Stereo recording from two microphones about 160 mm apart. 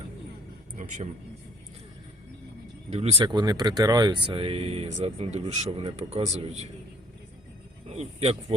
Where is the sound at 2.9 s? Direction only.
40° right (ahead or behind).